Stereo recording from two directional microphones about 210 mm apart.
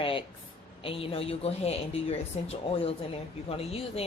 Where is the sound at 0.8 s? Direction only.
25° left (ahead or behind).